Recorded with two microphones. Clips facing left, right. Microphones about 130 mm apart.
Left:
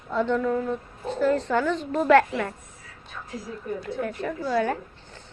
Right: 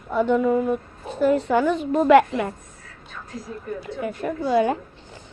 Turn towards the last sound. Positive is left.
turn(degrees=-20)  # may be behind; listen again after turning